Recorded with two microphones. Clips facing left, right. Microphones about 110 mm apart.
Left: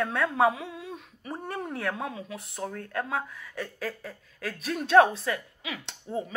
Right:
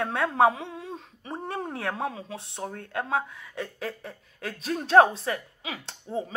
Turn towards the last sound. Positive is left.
turn(degrees=-25)  # may be behind; listen again after turning